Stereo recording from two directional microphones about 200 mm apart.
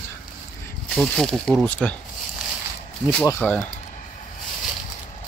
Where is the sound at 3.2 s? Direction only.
10° left (ahead or behind).